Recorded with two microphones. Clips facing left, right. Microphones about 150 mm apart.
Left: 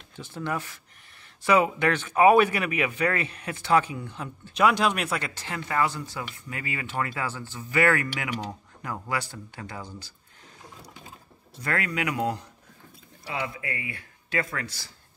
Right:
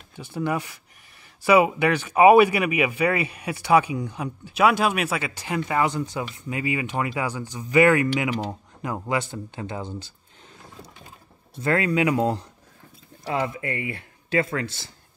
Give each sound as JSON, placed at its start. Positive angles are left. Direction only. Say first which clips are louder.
{"t": 0.1, "sound": "speech", "louder": "right 5 dB", "side_deg": -10}
{"t": 11.6, "sound": "speech", "louder": "right 7 dB", "side_deg": -25}
{"t": 13.2, "sound": "speech", "louder": "right 6 dB", "side_deg": -40}